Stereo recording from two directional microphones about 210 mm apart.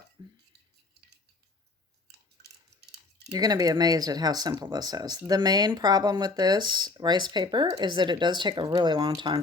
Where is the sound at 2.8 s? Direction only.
50° right (ahead or behind).